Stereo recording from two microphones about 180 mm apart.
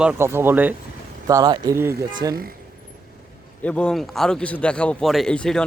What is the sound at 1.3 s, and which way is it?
Speech, 20° right (ahead or behind).